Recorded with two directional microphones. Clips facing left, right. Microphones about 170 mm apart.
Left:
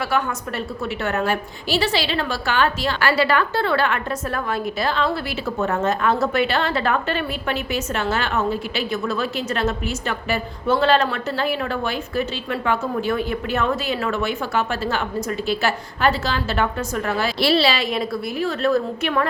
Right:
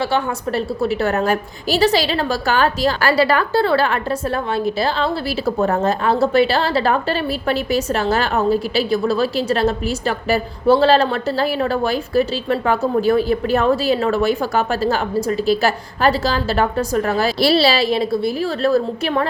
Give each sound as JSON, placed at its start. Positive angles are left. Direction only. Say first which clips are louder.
{"t": 0.1, "sound": "a woman's voice", "louder": "right 4 dB", "side_deg": -35}